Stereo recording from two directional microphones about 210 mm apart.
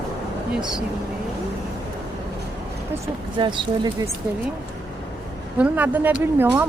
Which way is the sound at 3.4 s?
25° right (ahead or behind).